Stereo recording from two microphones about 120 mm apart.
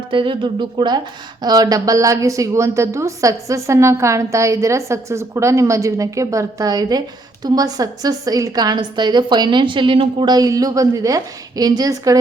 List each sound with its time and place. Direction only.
0.1 s a woman's voice: 40° right (ahead or behind)